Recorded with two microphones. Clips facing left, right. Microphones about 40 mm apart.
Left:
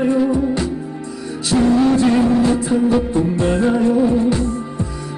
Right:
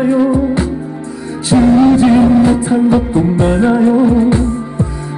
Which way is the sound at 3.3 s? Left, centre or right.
Right.